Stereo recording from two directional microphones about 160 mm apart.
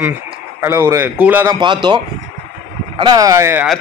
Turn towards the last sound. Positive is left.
turn(degrees=-15)  # may be behind; listen again after turning